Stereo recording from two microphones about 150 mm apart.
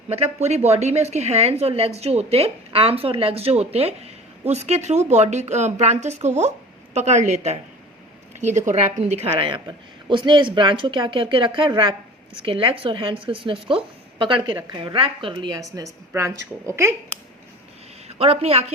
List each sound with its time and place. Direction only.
0.1 s a woman's voice: 45° right (ahead or behind); by 16.9 s 20° right (ahead or behind)
18.1 s a woman's voice: 40° right (ahead or behind)